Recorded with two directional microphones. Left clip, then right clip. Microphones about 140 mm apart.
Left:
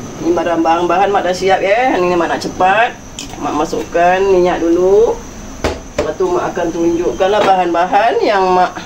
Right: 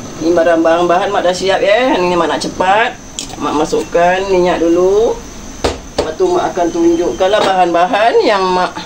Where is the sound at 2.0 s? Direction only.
60° right (ahead or behind).